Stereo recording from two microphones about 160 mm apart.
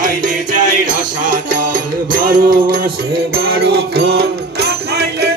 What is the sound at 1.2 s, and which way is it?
Music, 60° right (ahead or behind).